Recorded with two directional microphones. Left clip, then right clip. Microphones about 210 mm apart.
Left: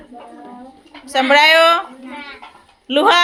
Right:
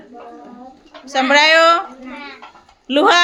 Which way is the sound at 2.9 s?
10° right (ahead or behind).